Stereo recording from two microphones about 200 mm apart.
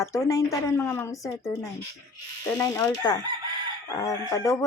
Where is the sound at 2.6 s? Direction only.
15° left (ahead or behind).